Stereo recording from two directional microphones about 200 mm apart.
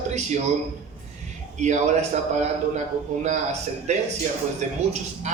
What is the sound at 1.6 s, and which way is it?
Speech, 35° right (ahead or behind).